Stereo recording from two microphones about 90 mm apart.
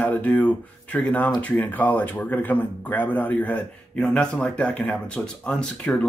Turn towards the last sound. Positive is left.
turn(degrees=10)  # may be behind; listen again after turning